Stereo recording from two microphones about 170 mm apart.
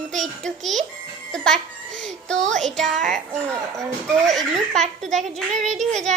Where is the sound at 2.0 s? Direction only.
5° left (ahead or behind).